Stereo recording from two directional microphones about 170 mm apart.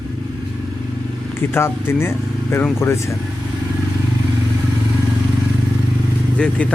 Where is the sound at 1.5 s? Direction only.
15° left (ahead or behind).